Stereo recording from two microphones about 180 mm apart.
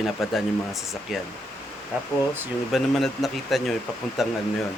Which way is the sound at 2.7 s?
Centre (ahead or behind).